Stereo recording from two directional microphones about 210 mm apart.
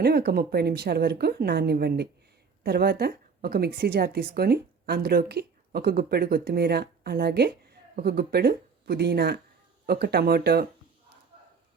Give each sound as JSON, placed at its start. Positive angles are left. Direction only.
{"t": 0.0, "sound": "speech", "side_deg": -50}